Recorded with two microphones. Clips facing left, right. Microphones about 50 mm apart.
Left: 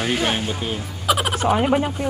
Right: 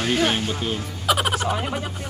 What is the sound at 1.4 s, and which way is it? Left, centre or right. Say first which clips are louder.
Speech: left 7 dB; left.